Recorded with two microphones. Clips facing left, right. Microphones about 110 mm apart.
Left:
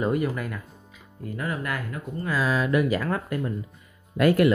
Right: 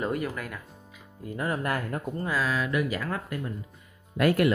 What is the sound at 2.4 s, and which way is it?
Speech, 30° left (ahead or behind).